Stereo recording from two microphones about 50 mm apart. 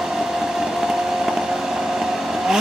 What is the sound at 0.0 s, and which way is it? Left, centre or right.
Vehicle, centre.